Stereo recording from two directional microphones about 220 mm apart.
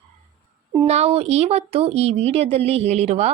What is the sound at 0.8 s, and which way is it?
Speech, 30° right (ahead or behind).